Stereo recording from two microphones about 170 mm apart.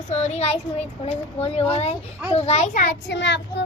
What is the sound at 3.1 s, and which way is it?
Child singing, 90° left.